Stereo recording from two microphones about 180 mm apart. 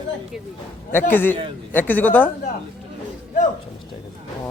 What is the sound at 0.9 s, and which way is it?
A man's voice, 10° left (ahead or behind).